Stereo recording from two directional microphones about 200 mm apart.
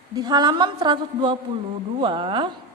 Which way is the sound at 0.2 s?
20° right (ahead or behind).